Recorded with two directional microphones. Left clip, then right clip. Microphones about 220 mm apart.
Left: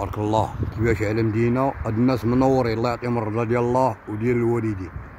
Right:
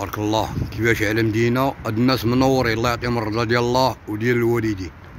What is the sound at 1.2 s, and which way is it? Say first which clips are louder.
Speech: right 3 dB; 45° right (ahead or behind).